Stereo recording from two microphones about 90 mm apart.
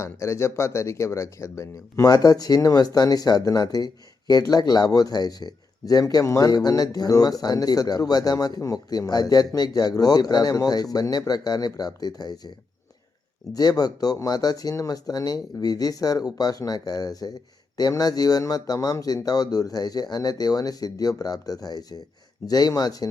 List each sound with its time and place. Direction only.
0.0 s speech: 35° left (ahead or behind); by 12.5 s 50° left (ahead or behind)
13.5 s speech: 45° left (ahead or behind)